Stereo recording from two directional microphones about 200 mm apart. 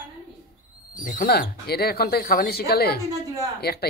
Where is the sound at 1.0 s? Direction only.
50° left (ahead or behind).